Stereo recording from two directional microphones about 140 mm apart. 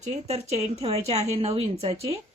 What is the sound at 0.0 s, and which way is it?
Speech, 50° right (ahead or behind).